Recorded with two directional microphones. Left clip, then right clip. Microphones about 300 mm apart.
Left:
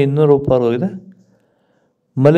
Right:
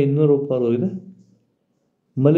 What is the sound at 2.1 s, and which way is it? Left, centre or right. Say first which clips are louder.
Speech: left 5 dB; left.